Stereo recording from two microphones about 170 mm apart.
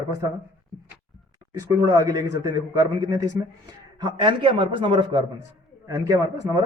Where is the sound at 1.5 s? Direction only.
20° right (ahead or behind).